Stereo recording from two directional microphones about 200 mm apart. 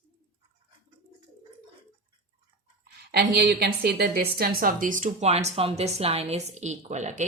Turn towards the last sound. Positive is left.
turn(degrees=-35)  # may be behind; listen again after turning